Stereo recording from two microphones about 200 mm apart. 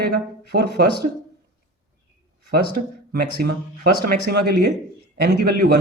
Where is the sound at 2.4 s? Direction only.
50° right (ahead or behind).